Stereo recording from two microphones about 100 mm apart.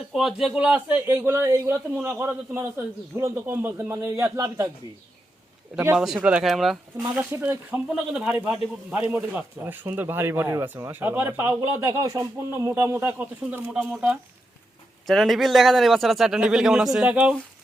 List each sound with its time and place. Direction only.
0.1 s a man's voice: 5° right (ahead or behind); by 4.7 s 35° right (ahead or behind)
5.9 s speech: 5° right (ahead or behind)
6.4 s a man's voice: centre (ahead or behind)
7.2 s a man's voice: 20° right (ahead or behind)
11.9 s a man's voice: 35° right (ahead or behind); by 13.7 s 20° right (ahead or behind)
15.0 s a man's voice: centre (ahead or behind)